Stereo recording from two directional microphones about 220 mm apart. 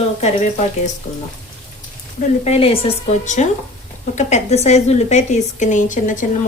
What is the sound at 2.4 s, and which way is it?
A woman's voice, 25° left (ahead or behind).